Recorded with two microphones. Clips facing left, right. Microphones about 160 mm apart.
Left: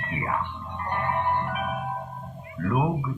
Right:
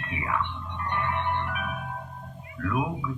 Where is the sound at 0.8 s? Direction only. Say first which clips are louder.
Left 3 dB; 35° left (ahead or behind).